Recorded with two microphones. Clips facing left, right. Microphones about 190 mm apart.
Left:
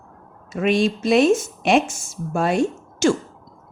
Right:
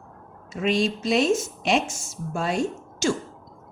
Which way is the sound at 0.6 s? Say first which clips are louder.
Left 4 dB; 55° left (ahead or behind).